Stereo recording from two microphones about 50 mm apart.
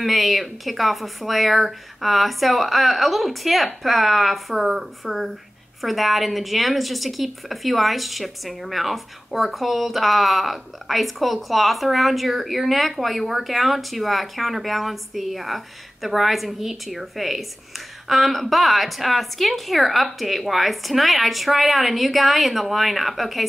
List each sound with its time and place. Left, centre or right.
0.0 s a woman's voice: centre